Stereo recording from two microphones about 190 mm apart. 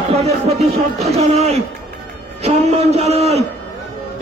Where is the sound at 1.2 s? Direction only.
35° right (ahead or behind).